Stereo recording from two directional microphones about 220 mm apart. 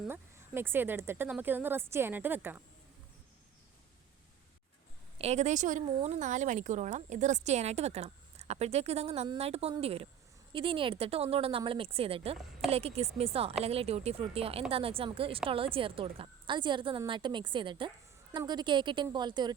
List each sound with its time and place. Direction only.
0.1 s speech: 10° right (ahead or behind)
5.1 s a woman's voice: 30° right (ahead or behind)